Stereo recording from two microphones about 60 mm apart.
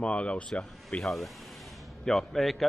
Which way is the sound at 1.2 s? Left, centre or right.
Centre.